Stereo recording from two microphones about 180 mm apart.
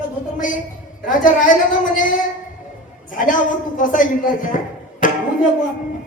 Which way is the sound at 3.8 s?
45° left (ahead or behind).